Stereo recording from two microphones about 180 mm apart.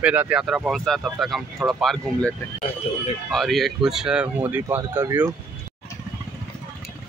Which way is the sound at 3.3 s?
Centre (ahead or behind).